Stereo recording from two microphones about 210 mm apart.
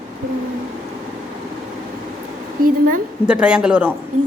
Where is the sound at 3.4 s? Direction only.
5° right (ahead or behind).